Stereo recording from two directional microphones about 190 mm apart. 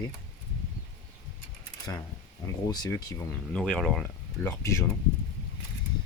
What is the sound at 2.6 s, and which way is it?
Speech, 20° left (ahead or behind).